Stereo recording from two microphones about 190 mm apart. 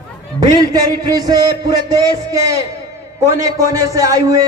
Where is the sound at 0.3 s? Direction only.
20° right (ahead or behind).